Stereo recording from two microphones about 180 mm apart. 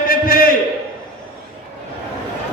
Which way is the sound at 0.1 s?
55° left (ahead or behind).